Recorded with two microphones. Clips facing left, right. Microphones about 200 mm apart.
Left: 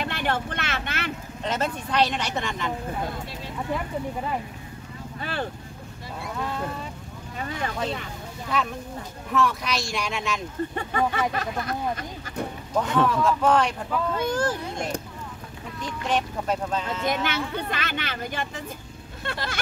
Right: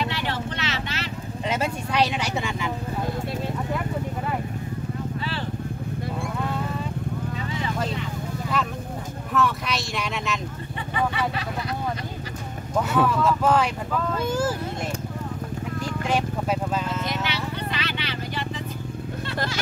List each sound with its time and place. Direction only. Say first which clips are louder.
0.0 s vehicle: even; 50° left (ahead or behind)
1.4 s vehicle: right 1 dB; 10° right (ahead or behind)
5.2 s vehicle: left 1 dB; 50° left (ahead or behind)
9.3 s a sound: even; centre (ahead or behind)
10.9 s speech: right 1 dB; 45° left (ahead or behind)
12.7 s speech: right 1 dB; 5° right (ahead or behind)
16.1 s speech: even; 5° right (ahead or behind)
17.0 s vehicle: left 2 dB; 50° left (ahead or behind)